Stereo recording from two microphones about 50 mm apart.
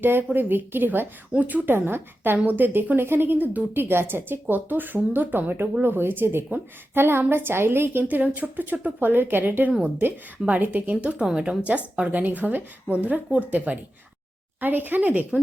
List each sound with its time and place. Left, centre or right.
0.0 s a woman's voice: right
1.3 s a woman's voice: right
1.7 s a woman's voice: right
8.0 s a woman's voice: right
12.2 s a woman's voice: right